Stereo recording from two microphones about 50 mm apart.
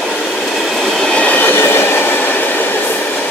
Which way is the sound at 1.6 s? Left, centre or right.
Left.